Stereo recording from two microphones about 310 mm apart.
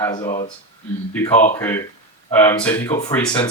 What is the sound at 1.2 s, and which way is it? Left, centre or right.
Speech, left.